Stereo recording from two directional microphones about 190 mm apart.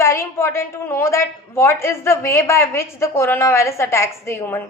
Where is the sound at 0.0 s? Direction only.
15° left (ahead or behind).